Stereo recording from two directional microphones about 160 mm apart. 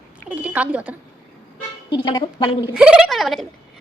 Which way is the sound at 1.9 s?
30° left (ahead or behind).